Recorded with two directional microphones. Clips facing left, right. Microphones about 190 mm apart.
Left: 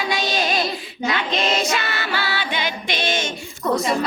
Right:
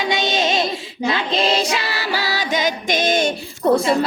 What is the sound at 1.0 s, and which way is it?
Music, 30° right (ahead or behind).